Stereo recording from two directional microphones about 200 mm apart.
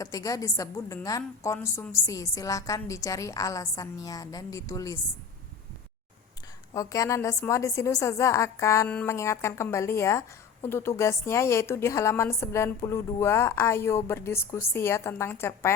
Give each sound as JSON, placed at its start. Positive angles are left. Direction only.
{"t": 0.0, "sound": "a woman's voice", "side_deg": 15}
{"t": 6.7, "sound": "a woman's voice", "side_deg": 15}